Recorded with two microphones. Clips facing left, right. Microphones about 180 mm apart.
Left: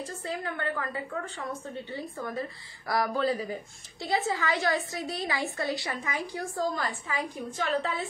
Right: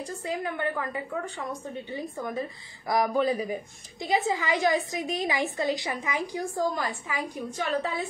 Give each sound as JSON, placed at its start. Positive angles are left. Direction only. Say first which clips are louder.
{"t": 0.0, "sound": "a woman's voice", "louder": "right 3 dB", "side_deg": -15}